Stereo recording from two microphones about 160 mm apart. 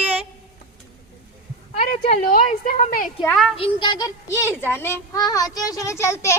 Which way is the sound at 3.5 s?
30° left (ahead or behind).